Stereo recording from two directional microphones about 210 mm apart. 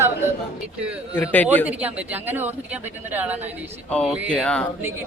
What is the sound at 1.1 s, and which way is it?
Speech, 5° left (ahead or behind).